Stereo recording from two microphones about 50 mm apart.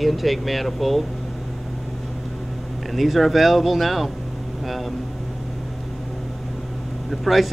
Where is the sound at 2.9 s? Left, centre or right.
Centre.